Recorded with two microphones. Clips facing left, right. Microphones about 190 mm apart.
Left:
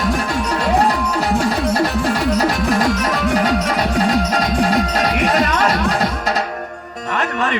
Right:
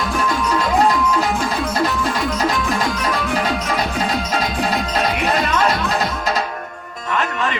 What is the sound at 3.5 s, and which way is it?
Music, 40° left (ahead or behind).